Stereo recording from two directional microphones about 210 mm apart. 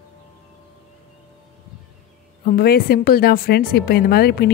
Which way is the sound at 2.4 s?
45° left (ahead or behind).